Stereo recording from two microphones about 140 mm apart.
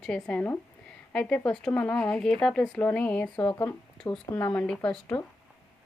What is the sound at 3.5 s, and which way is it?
Speech, 20° left (ahead or behind).